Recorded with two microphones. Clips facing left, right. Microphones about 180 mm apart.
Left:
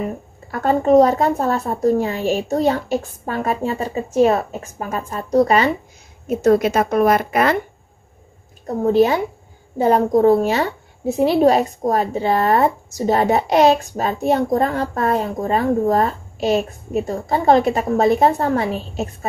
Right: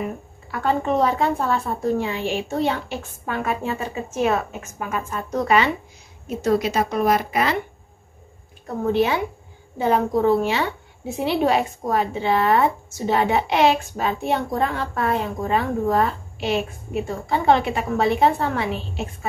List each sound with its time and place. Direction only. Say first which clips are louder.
0.5 s a woman's voice: left 7 dB; 40° left (ahead or behind)
6.2 s a woman's voice: left 6 dB; 50° left (ahead or behind)
8.6 s a woman's voice: left 5 dB; 40° left (ahead or behind)